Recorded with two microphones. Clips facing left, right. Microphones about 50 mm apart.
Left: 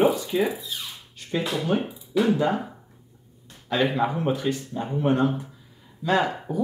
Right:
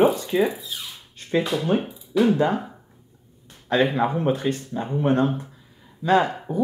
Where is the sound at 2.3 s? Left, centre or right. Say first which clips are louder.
Right 2 dB; right.